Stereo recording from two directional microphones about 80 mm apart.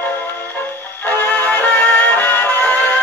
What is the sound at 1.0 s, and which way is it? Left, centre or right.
Music, left.